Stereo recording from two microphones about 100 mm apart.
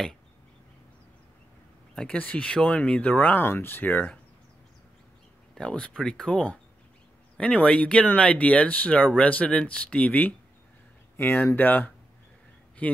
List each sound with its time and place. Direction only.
2.0 s speech: 10° left (ahead or behind)
5.5 s speech: 10° left (ahead or behind)